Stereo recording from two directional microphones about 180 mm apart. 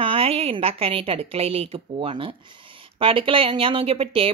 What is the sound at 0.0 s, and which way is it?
A woman's voice, 30° right (ahead or behind).